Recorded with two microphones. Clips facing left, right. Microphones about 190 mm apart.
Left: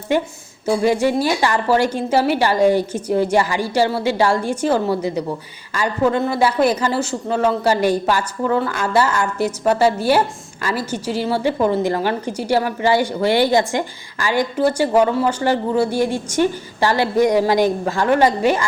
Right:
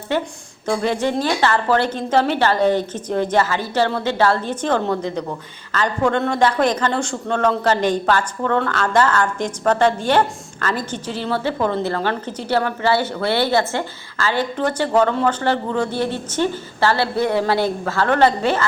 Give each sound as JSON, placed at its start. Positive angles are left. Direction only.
{"t": 0.6, "sound": "speech", "side_deg": 10}